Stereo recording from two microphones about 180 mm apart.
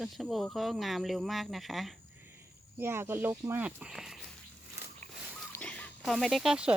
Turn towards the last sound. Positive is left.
turn(degrees=-5)  # may be behind; listen again after turning